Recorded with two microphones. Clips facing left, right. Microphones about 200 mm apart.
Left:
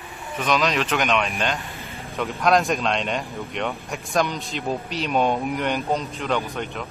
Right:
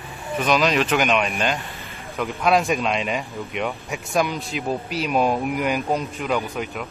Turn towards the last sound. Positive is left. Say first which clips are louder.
# right 1 dB
turn(degrees=-5)  # may be behind; listen again after turning